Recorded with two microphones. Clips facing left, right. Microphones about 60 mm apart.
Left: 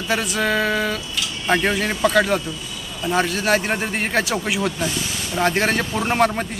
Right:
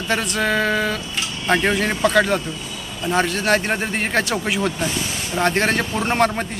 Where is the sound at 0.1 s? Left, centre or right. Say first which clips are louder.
Even; centre.